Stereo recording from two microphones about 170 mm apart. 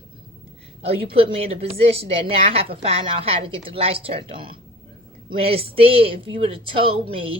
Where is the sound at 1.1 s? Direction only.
35° right (ahead or behind).